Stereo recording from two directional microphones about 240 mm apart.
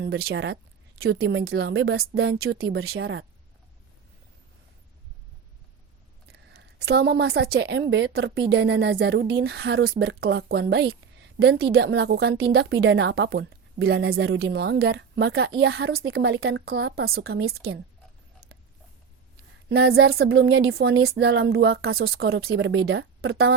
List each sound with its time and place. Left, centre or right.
0.0 s speech: right
2.4 s speech: right
6.3 s speech: right
19.6 s speech: right